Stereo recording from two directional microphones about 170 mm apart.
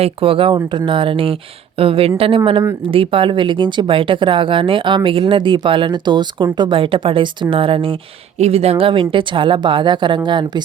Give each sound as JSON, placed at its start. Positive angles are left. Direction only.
{"t": 0.0, "sound": "speech", "side_deg": -30}